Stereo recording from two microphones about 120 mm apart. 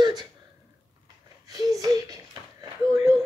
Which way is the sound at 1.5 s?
30° right (ahead or behind).